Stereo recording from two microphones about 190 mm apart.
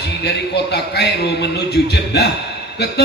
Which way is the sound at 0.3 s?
60° left (ahead or behind).